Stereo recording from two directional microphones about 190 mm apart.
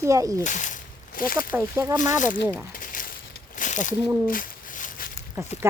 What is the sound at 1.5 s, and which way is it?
Speech, 10° right (ahead or behind).